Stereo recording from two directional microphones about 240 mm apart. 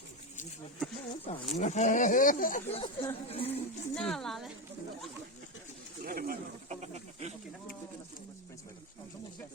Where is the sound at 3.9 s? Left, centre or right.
Centre.